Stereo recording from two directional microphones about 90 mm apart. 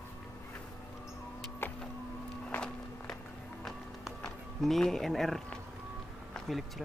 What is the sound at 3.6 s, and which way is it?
Music, 5° left (ahead or behind).